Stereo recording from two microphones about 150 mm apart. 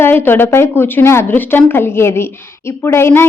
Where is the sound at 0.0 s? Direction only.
15° left (ahead or behind).